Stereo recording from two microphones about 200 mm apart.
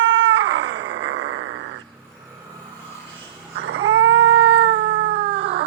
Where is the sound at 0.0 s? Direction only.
75° right (ahead or behind).